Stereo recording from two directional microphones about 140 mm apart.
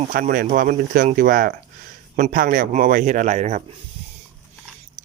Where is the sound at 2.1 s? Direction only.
75° right (ahead or behind); by 3.6 s 55° right (ahead or behind).